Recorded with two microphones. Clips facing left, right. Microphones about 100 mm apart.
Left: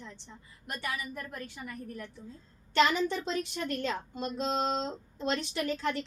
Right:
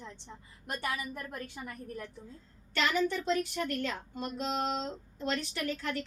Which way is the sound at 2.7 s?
25° left (ahead or behind).